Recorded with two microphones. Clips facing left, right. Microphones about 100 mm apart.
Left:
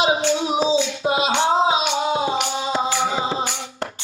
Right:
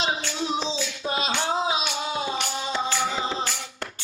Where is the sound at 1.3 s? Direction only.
25° left (ahead or behind).